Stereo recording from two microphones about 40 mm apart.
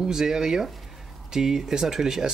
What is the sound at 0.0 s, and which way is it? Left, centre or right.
Speech, centre.